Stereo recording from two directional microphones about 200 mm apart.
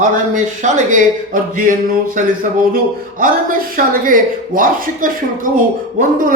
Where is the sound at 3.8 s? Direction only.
45° right (ahead or behind).